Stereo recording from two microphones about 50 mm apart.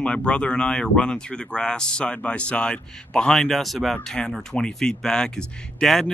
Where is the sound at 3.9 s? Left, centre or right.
Centre.